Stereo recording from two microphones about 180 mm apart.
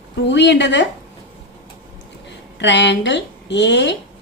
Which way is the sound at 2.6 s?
80° left.